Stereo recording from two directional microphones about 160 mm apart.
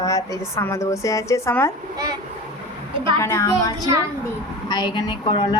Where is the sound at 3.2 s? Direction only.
15° left (ahead or behind).